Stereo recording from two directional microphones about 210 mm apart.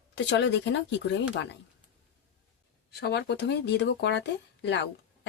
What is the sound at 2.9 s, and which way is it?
Speech, 50° left (ahead or behind).